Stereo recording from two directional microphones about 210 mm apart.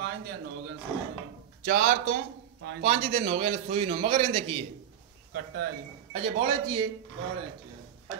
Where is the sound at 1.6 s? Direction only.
40° right (ahead or behind).